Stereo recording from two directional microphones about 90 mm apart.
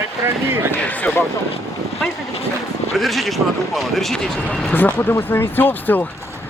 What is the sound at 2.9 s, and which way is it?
Speech, centre (ahead or behind).